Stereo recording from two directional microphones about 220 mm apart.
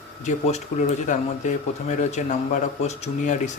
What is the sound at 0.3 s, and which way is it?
Speech, 30° left (ahead or behind).